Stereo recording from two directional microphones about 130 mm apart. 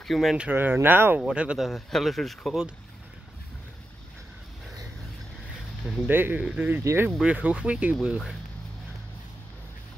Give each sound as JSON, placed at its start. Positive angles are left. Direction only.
{"t": 0.0, "sound": "speech", "side_deg": 0}
{"t": 0.5, "sound": "speech", "side_deg": -15}
{"t": 6.0, "sound": "speech", "side_deg": -15}
{"t": 6.8, "sound": "speech", "side_deg": -20}
{"t": 7.1, "sound": "speech", "side_deg": -5}